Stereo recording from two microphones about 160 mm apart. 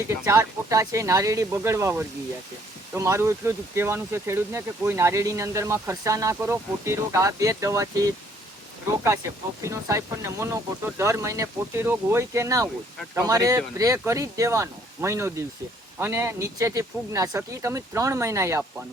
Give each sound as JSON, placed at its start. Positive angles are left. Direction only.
{"t": 0.3, "sound": "speech", "side_deg": -20}
{"t": 9.6, "sound": "speech", "side_deg": -20}